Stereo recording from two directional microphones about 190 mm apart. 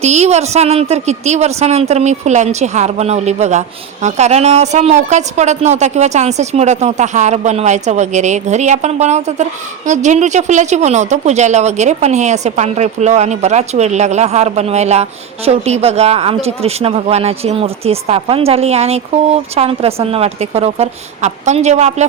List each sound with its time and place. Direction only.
0.0 s speech: 35° right (ahead or behind)